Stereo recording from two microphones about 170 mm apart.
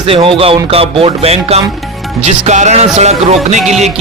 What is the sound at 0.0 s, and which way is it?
A man's voice, 30° right (ahead or behind).